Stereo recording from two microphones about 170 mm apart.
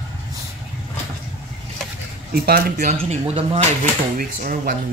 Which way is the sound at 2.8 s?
40° right (ahead or behind).